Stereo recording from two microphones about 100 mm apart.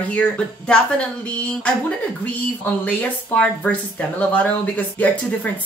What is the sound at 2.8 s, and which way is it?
Speech, 15° left (ahead or behind).